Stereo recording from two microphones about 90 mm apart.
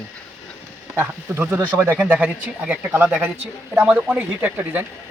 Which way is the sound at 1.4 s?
25° right (ahead or behind).